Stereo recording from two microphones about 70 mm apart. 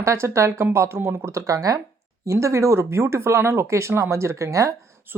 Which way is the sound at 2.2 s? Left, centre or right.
Right.